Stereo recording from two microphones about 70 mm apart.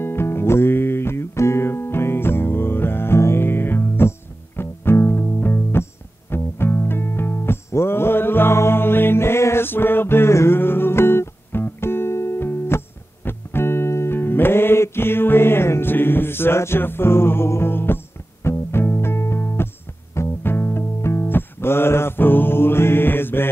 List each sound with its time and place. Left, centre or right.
0.0 s music: left